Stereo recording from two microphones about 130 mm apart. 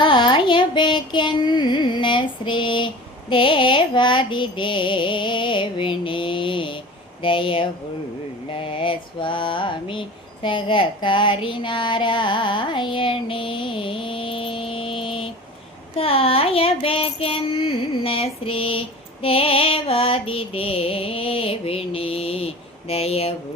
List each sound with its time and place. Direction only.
0.0 s music: 40° left (ahead or behind)
8.4 s mantra: 45° left (ahead or behind)
16.0 s a sound: 45° left (ahead or behind)